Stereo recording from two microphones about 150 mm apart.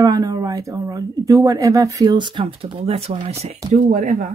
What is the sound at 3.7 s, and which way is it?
Speech, 55° right (ahead or behind).